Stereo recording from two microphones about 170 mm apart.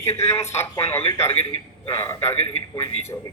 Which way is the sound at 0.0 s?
15° left (ahead or behind).